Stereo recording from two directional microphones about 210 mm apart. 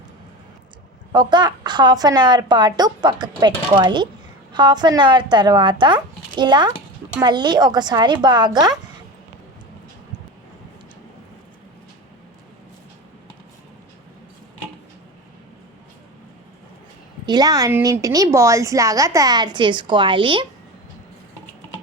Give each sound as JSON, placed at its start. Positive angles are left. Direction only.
{"t": 1.1, "sound": "a woman's voice", "side_deg": -20}
{"t": 17.2, "sound": "a woman's voice", "side_deg": -20}